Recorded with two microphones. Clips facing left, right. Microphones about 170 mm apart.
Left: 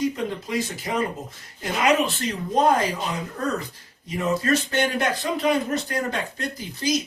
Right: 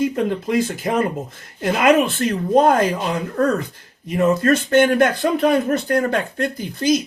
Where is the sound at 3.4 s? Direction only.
55° right (ahead or behind).